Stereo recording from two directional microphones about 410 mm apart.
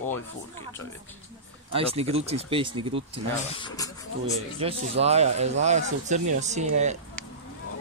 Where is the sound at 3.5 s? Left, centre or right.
Centre.